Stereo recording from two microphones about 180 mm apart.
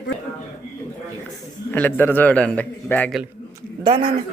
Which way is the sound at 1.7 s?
10° left (ahead or behind).